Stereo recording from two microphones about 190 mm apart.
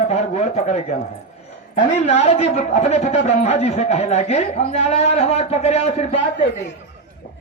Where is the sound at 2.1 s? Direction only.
35° left (ahead or behind).